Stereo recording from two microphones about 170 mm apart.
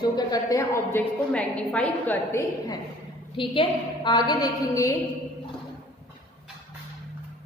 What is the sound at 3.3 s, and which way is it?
A woman's voice, 30° left (ahead or behind).